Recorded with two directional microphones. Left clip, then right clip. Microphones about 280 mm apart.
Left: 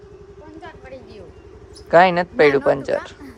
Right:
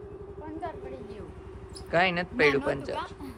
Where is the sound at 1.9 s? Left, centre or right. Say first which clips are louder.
Left 12 dB; left.